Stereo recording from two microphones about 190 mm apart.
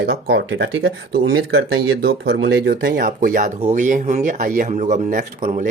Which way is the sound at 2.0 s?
70° right (ahead or behind).